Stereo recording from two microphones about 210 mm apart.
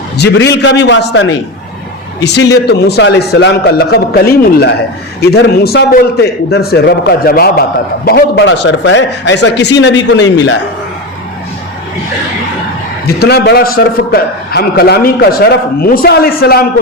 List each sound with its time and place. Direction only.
0.2 s a man's voice: 55° left (ahead or behind)
13.1 s a man's voice: 50° left (ahead or behind)